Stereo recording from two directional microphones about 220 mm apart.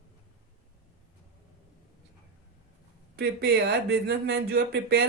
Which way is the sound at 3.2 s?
45° right (ahead or behind).